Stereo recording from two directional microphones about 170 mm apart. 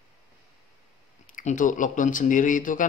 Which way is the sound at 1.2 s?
50° left (ahead or behind).